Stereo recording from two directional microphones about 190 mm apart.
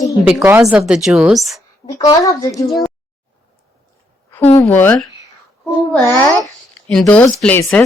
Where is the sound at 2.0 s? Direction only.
20° left (ahead or behind).